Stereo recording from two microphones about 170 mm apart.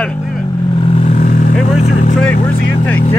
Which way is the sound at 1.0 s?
45° left (ahead or behind).